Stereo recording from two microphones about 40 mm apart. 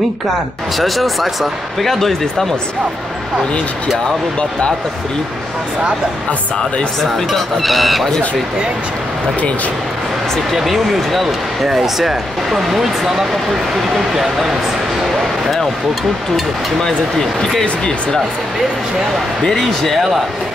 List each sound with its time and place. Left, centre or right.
0.7 s speech: centre
4.0 s speech: left
7.0 s speech: centre
10.5 s speech: centre
19.4 s speech: centre